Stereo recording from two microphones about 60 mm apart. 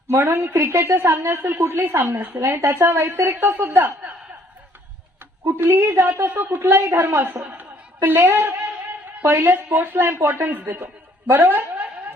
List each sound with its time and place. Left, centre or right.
0.1 s a woman's voice: right
2.4 s speech: right
3.4 s a woman's voice: right
5.5 s a woman's voice: right
6.2 s a woman's voice: right
6.7 s a woman's voice: right
8.6 s a sound: right
9.2 s a woman's voice: right
11.3 s a sound: right